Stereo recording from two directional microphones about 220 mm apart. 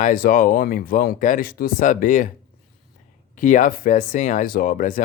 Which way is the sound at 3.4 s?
35° left (ahead or behind).